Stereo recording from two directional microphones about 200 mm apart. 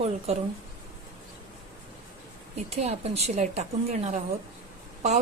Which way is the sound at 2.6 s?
30° right (ahead or behind).